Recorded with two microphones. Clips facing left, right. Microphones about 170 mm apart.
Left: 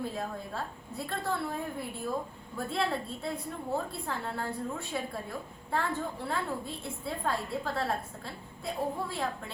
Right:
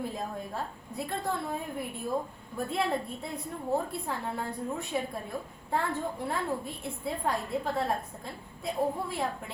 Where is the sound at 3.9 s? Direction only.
15° right (ahead or behind).